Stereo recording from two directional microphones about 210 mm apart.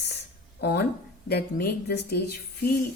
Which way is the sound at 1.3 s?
50° left (ahead or behind).